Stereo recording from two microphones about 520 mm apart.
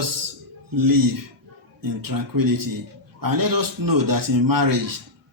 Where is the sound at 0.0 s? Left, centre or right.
Right.